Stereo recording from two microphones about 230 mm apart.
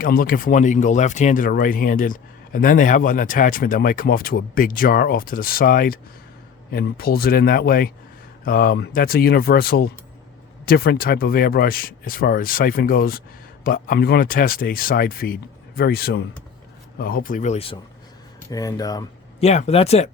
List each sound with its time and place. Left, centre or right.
0.0 s speech: left
18.5 s speech: centre
19.4 s speech: left